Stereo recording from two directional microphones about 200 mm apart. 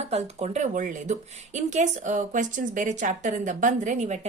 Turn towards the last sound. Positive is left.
turn(degrees=-35)  # may be behind; listen again after turning